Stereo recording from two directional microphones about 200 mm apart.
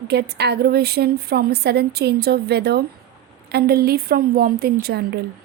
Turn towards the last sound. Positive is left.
turn(degrees=-55)  # may be behind; listen again after turning